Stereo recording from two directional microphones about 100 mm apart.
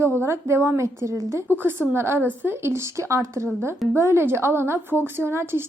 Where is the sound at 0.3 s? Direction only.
25° right (ahead or behind).